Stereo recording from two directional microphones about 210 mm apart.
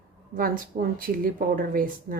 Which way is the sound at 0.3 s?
45° right (ahead or behind).